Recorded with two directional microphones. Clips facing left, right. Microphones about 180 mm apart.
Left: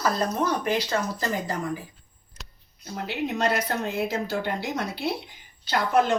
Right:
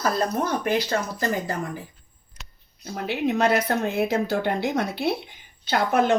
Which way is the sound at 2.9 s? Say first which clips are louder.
Right 4 dB; 55° right (ahead or behind).